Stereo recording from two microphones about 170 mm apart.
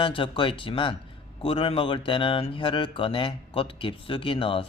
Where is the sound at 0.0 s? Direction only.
30° left (ahead or behind).